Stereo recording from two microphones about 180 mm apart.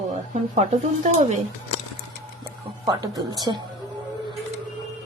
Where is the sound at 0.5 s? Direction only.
40° right (ahead or behind).